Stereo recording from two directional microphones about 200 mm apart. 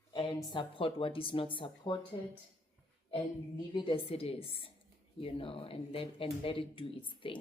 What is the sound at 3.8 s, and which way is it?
A woman's voice, 25° left (ahead or behind).